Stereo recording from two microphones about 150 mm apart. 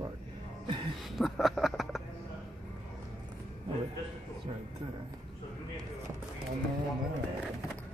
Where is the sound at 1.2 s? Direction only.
Centre (ahead or behind).